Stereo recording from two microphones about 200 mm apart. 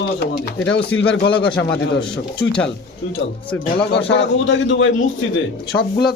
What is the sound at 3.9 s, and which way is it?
A man's voice, 60° left (ahead or behind).